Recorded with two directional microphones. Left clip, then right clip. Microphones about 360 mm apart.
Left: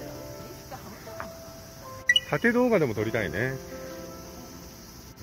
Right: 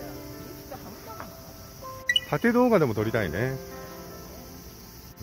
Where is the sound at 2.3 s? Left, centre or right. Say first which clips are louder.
Right 1 dB; centre.